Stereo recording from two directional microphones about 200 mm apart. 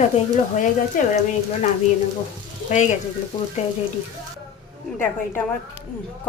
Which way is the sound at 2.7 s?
35° left (ahead or behind).